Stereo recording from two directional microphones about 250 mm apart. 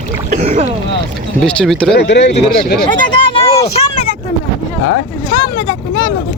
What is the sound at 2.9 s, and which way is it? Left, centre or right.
Speech, centre.